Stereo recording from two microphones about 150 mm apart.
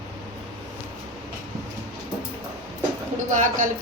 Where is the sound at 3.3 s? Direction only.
55° right (ahead or behind).